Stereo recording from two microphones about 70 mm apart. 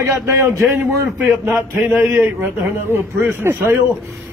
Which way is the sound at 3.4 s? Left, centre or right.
Right.